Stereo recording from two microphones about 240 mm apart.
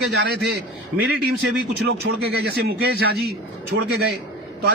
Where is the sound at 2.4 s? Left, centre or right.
Right.